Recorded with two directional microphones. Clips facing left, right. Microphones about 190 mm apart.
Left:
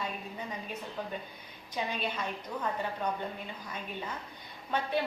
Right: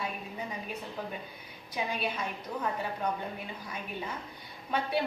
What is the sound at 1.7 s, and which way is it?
Speech, 10° right (ahead or behind).